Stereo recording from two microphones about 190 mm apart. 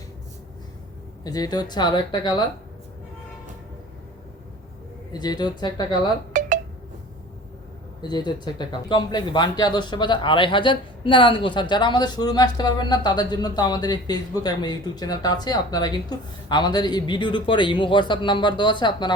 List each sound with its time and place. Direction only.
1.2 s speech: 20° left (ahead or behind)
5.1 s speech: 20° left (ahead or behind)
6.3 s a sound: 40° right (ahead or behind)
8.0 s speech: 25° left (ahead or behind)